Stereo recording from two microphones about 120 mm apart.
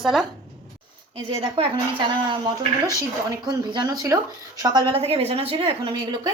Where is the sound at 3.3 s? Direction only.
35° right (ahead or behind).